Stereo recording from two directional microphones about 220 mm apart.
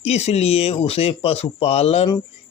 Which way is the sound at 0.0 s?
30° left (ahead or behind).